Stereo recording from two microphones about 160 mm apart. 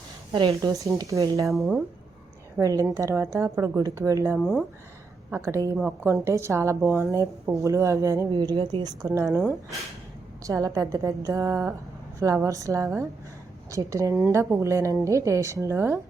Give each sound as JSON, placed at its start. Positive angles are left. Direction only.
{"t": 0.3, "sound": "a woman's voice", "side_deg": -35}
{"t": 0.6, "sound": "a woman's voice", "side_deg": -20}
{"t": 1.5, "sound": "speech", "side_deg": 0}
{"t": 2.6, "sound": "a woman's voice", "side_deg": -20}
{"t": 4.4, "sound": "speech", "side_deg": 0}
{"t": 5.3, "sound": "a woman's voice", "side_deg": -20}
{"t": 5.7, "sound": "a woman's voice", "side_deg": -10}
{"t": 10.4, "sound": "a woman's voice", "side_deg": -20}